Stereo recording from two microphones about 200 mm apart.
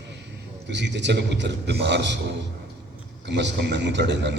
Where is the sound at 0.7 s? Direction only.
60° right (ahead or behind).